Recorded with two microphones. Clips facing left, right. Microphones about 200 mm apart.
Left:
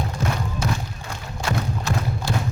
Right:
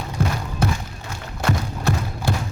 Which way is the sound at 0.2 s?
55° right (ahead or behind).